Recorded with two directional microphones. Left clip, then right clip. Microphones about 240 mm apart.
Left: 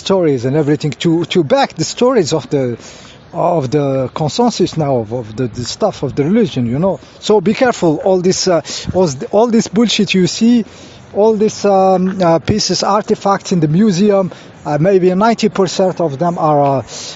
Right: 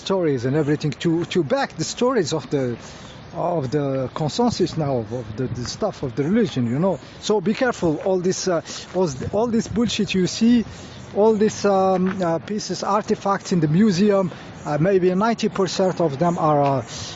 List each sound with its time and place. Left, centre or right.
0.0 s speech: left